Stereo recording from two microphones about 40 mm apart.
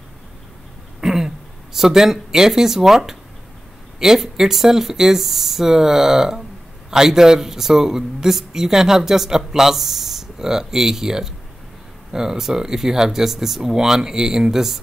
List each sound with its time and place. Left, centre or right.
1.0 s speech: centre